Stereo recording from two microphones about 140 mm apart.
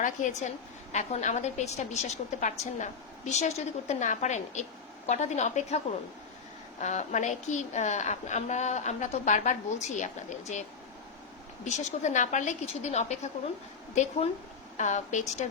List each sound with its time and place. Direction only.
0.0 s a woman's voice: 60° left (ahead or behind)